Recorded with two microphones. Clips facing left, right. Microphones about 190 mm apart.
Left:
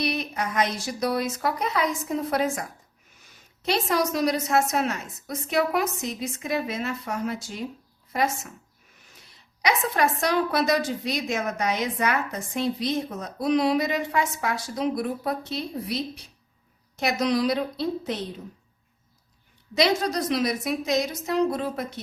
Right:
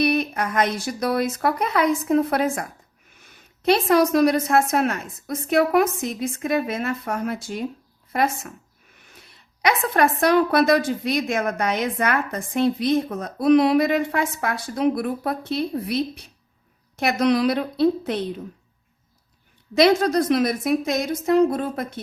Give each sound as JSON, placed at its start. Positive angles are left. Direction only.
{"t": 0.0, "sound": "a woman's voice", "side_deg": -55}
{"t": 3.7, "sound": "a woman's voice", "side_deg": -55}
{"t": 9.6, "sound": "a woman's voice", "side_deg": -55}
{"t": 19.7, "sound": "a woman's voice", "side_deg": -55}